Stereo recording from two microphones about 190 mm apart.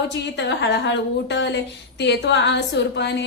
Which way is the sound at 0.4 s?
65° left (ahead or behind).